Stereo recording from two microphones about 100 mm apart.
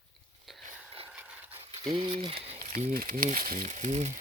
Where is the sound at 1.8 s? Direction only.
50° right (ahead or behind).